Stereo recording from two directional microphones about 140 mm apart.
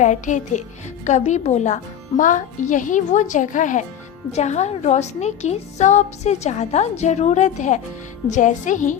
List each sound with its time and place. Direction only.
0.0 s speech: 60° left (ahead or behind)
4.3 s a woman's voice: 55° left (ahead or behind)